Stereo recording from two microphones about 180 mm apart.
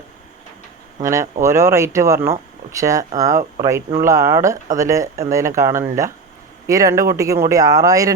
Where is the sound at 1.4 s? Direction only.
15° right (ahead or behind).